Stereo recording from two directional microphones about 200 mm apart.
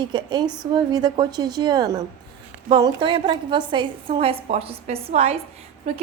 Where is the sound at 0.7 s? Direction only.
20° right (ahead or behind).